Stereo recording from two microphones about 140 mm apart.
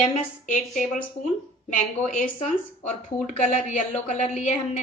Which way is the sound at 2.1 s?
55° left (ahead or behind).